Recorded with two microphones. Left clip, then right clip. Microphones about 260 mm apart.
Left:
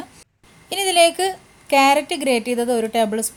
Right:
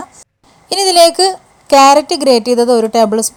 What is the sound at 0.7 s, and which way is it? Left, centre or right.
A woman's voice, right.